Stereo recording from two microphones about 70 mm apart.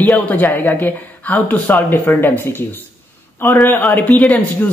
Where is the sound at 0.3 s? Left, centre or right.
Left.